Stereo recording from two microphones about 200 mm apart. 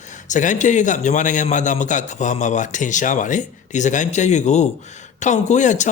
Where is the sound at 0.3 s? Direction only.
40° left (ahead or behind).